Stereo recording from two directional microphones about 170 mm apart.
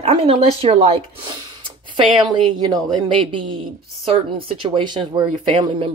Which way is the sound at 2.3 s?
25° right (ahead or behind).